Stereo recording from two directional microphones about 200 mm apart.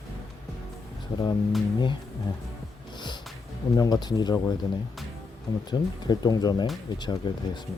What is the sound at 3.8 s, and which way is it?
Speech, 20° left (ahead or behind).